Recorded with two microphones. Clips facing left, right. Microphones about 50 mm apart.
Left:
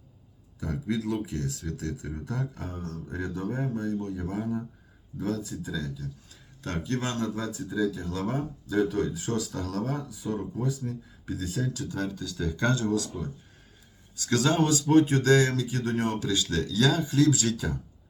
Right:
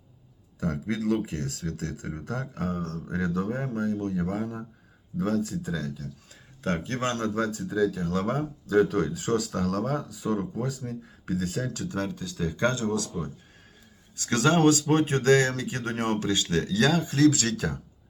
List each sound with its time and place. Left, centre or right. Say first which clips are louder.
0.6 s speech: right 2 dB; right
3.2 s speech: right 6 dB; right
3.5 s speech: right 1 dB; right
6.6 s speech: right 2 dB; right
8.4 s speech: right 4 dB; right
9.9 s speech: right 4 dB; right
15.8 s speech: right 2 dB; right